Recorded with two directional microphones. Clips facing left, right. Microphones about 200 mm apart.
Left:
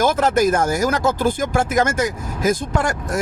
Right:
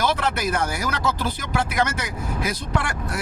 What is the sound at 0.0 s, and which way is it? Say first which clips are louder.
Speech: left 7 dB; 45° left (ahead or behind).